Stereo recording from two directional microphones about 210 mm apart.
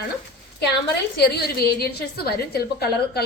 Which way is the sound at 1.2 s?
50° left (ahead or behind).